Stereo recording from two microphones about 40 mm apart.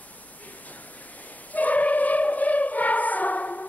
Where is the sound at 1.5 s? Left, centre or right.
Left.